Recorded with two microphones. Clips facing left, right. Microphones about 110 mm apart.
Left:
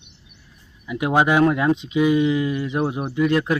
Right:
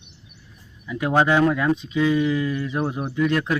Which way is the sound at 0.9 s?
15° left (ahead or behind).